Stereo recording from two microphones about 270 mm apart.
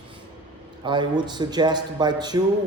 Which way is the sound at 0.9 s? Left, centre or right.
Centre.